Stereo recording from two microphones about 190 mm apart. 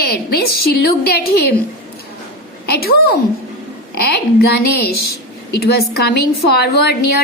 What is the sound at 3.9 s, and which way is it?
A woman's voice, 55° left (ahead or behind).